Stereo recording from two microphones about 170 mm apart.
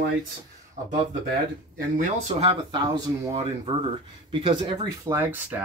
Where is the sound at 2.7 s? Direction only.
25° right (ahead or behind).